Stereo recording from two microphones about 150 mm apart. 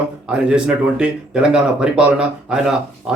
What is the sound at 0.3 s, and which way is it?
Speech, 5° right (ahead or behind).